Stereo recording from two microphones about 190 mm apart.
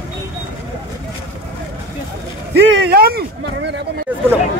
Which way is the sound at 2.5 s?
60° right (ahead or behind).